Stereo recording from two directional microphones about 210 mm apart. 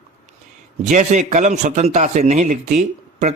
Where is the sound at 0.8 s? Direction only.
35° right (ahead or behind).